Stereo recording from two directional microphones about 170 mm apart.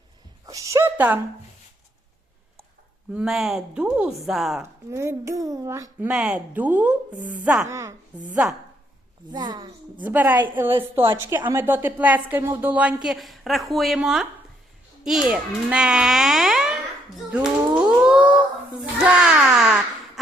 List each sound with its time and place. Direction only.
0.4 s speech: 20° right (ahead or behind)
3.1 s a child's voice: 5° right (ahead or behind)
4.9 s speech: 15° right (ahead or behind)
6.1 s speech: 5° right (ahead or behind)
9.3 s a woman's voice: 25° right (ahead or behind)
10.0 s a child's voice: 10° right (ahead or behind)
17.3 s a sound: 5° right (ahead or behind)
19.0 s a child's voice: 5° right (ahead or behind)